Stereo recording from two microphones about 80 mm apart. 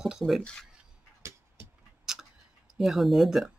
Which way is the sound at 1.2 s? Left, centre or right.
Right.